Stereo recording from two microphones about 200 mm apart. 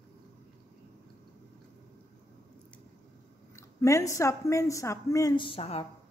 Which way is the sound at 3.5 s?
15° left (ahead or behind).